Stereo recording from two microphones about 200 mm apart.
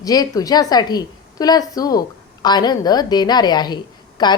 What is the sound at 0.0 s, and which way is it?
A woman's voice, 20° left (ahead or behind).